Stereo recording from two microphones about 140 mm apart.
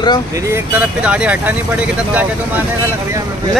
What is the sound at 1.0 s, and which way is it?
Speech, 10° right (ahead or behind).